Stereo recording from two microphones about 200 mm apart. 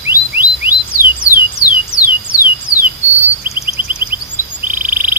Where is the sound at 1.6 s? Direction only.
15° left (ahead or behind).